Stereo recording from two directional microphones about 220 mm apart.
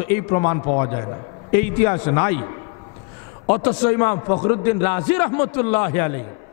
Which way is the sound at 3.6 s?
15° left (ahead or behind).